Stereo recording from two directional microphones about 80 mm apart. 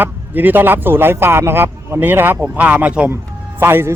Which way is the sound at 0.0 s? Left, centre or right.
Right.